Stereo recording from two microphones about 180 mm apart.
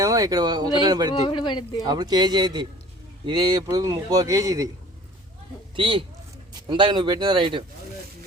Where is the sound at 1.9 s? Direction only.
20° right (ahead or behind).